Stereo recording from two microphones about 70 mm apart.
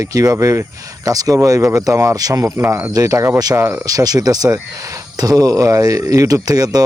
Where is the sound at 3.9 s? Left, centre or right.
Right.